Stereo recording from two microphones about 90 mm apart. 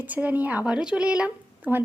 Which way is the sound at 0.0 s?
15° right (ahead or behind).